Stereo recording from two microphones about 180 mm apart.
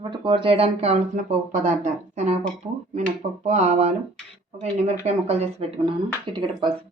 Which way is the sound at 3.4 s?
35° right (ahead or behind).